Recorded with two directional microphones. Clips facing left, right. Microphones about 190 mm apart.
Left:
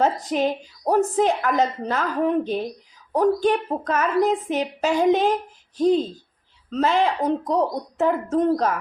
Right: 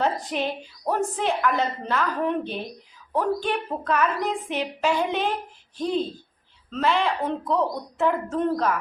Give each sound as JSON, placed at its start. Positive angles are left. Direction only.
{"t": 0.0, "sound": "a woman's voice", "side_deg": 40}